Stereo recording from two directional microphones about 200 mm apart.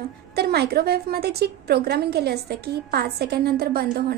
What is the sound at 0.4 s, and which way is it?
A woman's voice, 55° right (ahead or behind).